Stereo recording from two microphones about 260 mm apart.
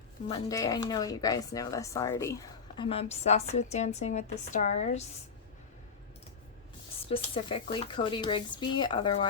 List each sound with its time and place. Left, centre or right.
0.3 s speech: centre
7.1 s speech: left